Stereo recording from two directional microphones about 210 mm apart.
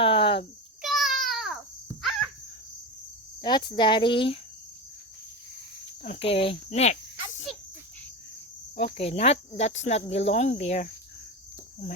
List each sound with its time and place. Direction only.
0.0 s a sound: 25° left (ahead or behind)
0.8 s babbling: centre (ahead or behind)
2.0 s cricket: centre (ahead or behind)
3.4 s speech: 20° left (ahead or behind)
6.0 s cricket: 30° left (ahead or behind)
8.7 s speech: 30° left (ahead or behind)